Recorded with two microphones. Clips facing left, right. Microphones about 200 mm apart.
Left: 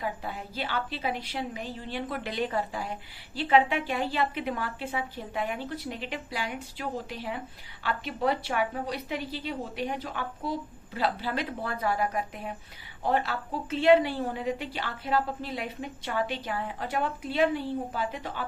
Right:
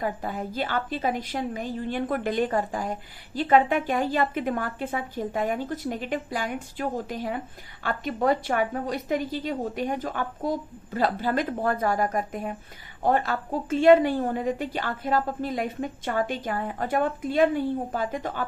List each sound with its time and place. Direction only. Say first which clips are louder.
0.0 s a woman's voice: right 5 dB; 45° right (ahead or behind)